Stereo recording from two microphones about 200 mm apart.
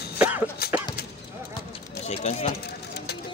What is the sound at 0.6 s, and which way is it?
Dog, 50° left (ahead or behind).